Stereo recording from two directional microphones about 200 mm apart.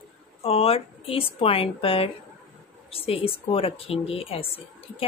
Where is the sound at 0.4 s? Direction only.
30° left (ahead or behind).